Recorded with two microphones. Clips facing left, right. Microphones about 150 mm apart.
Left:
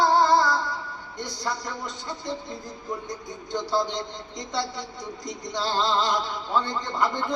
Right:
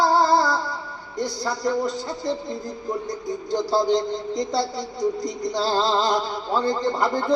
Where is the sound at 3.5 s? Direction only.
35° right (ahead or behind).